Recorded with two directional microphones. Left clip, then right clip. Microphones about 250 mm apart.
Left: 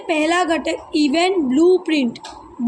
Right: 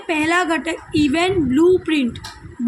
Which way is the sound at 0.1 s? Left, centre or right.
Right.